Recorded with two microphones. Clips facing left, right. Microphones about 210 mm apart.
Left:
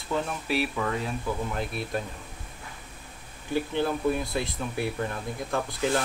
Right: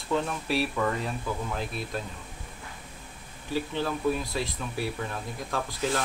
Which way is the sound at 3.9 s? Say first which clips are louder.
Left 1 dB; 5° left (ahead or behind).